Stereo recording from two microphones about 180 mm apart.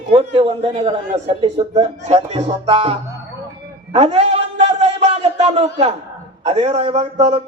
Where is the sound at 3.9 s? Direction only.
35° right (ahead or behind).